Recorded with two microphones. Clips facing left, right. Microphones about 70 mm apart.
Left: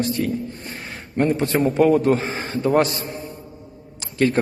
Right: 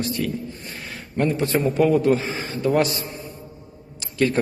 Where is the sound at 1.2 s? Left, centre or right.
Left.